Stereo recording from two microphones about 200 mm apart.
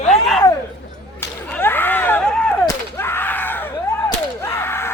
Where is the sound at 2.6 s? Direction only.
10° left (ahead or behind).